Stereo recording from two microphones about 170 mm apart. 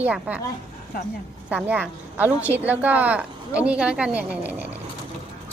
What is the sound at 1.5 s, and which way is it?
A woman's voice, 10° right (ahead or behind).